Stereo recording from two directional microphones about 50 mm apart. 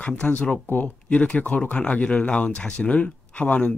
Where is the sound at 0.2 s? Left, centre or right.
Left.